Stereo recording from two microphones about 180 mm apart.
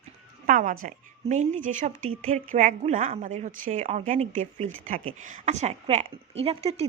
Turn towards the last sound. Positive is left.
turn(degrees=-35)  # may be behind; listen again after turning